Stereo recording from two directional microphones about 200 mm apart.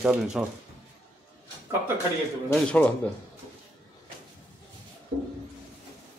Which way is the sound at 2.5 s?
5° left (ahead or behind).